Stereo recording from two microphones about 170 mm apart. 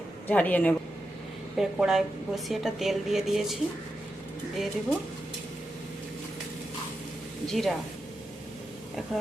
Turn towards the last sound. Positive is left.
turn(degrees=0)  # may be behind; listen again after turning